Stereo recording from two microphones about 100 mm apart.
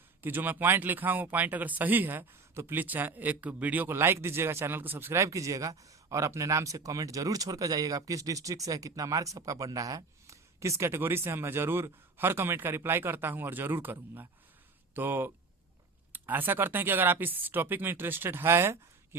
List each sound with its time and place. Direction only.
0.2 s speech: 20° right (ahead or behind)